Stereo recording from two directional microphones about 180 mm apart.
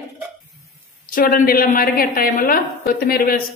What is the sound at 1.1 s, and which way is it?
A woman's voice, 50° left (ahead or behind).